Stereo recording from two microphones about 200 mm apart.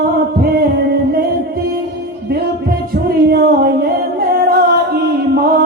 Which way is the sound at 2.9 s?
50° right (ahead or behind).